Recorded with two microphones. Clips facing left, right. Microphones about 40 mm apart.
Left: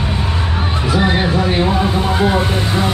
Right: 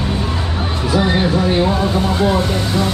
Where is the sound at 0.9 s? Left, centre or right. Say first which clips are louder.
Even; centre.